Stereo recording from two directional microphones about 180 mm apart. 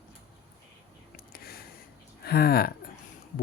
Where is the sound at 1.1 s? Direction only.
55° left (ahead or behind).